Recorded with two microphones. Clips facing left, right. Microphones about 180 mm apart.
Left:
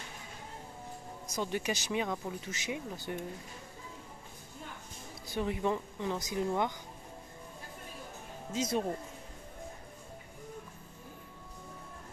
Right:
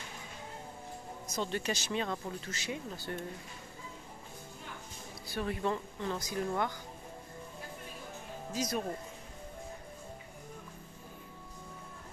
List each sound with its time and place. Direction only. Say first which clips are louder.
1.2 s speech: left 1 dB; 10° left (ahead or behind)
5.3 s speech: left 2 dB; 15° left (ahead or behind)
8.5 s speech: left 3 dB; 25° left (ahead or behind)